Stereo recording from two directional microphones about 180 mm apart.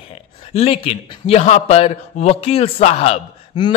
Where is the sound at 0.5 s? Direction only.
35° left (ahead or behind).